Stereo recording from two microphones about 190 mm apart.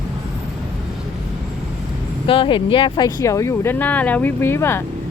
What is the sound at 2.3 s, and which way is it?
Speech, 25° left (ahead or behind).